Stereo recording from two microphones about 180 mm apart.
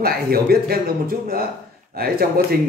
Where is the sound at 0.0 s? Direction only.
55° right (ahead or behind).